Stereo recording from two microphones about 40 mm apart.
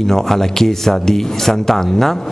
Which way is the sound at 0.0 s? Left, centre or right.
Centre.